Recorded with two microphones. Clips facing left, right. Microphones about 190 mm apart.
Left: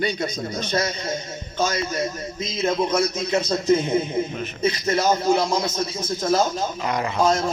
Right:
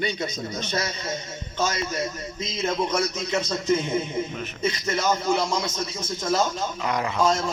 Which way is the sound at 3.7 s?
35° left (ahead or behind).